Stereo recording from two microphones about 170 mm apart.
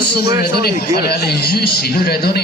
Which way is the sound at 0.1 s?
70° left (ahead or behind).